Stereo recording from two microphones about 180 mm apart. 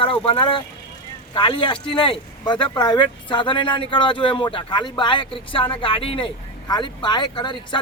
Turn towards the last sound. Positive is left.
turn(degrees=25)  # may be behind; listen again after turning